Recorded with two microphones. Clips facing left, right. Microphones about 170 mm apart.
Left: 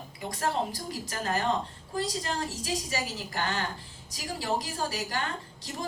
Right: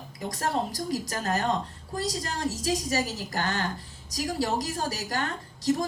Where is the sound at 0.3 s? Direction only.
40° right (ahead or behind).